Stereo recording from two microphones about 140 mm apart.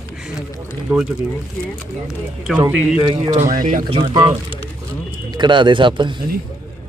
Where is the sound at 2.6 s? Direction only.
15° right (ahead or behind).